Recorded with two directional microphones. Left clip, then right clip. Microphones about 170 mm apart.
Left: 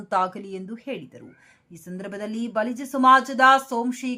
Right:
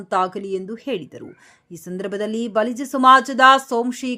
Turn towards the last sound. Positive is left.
turn(degrees=-30)  # may be behind; listen again after turning